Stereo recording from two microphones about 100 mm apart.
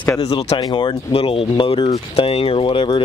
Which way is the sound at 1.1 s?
70° left (ahead or behind).